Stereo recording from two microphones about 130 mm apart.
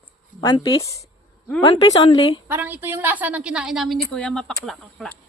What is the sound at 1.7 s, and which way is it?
Speech, 40° left (ahead or behind).